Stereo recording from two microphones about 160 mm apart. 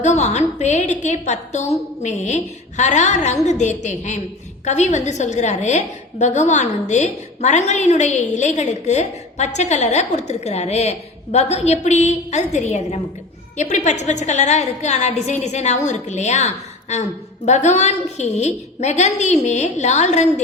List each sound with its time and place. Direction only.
0.0 s a woman's voice: 45° left (ahead or behind)